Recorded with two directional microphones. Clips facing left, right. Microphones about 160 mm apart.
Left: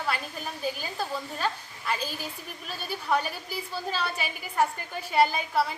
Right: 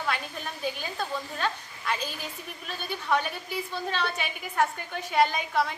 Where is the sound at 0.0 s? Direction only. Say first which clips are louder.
Even; 5° left (ahead or behind).